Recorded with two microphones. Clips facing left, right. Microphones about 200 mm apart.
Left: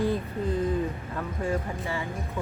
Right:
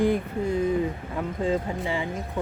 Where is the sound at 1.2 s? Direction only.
15° right (ahead or behind).